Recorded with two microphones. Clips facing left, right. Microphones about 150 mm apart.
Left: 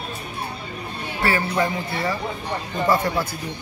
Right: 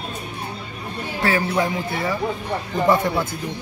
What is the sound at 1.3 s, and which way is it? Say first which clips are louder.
Speech: right 1 dB; 10° right (ahead or behind).